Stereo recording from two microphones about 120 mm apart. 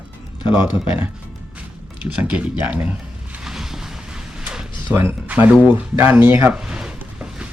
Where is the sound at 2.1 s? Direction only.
10° right (ahead or behind).